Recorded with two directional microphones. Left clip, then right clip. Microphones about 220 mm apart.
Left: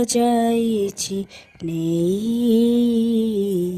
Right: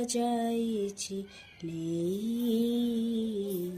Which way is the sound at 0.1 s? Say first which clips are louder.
Left 12 dB; 45° left (ahead or behind).